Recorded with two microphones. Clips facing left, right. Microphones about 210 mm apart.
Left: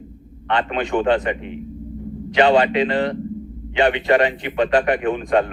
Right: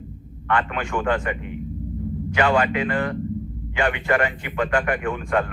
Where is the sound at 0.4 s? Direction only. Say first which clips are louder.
Left 3 dB; 25° left (ahead or behind).